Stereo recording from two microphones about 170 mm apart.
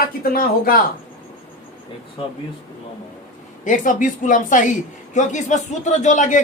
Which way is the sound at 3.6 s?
50° left (ahead or behind).